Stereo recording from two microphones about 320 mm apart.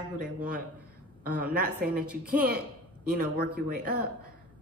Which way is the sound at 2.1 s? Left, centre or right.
Centre.